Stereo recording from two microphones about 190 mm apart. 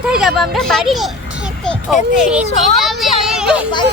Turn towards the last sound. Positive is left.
turn(degrees=-5)  # may be behind; listen again after turning